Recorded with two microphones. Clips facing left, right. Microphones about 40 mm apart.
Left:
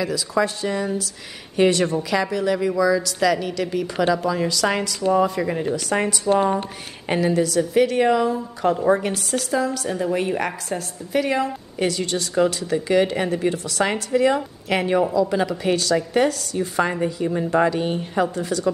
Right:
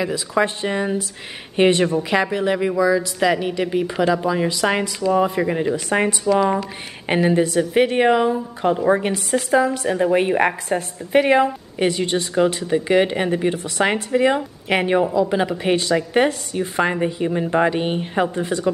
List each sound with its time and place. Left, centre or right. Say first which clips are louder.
0.0 s a woman's voice: right 2 dB; right